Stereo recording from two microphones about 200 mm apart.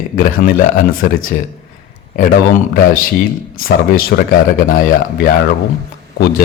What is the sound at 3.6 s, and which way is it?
A man's voice, 45° left (ahead or behind).